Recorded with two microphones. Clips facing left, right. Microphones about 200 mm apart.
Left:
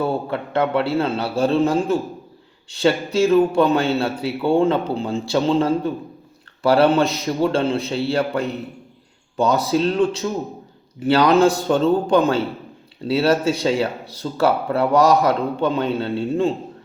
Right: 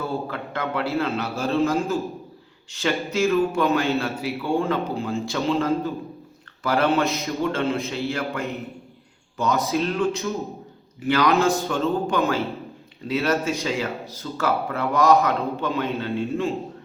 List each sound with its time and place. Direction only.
0.0 s a man's voice: 30° left (ahead or behind)
2.6 s a man's voice: 30° left (ahead or behind)